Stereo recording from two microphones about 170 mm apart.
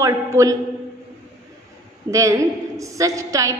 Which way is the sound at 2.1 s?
20° right (ahead or behind).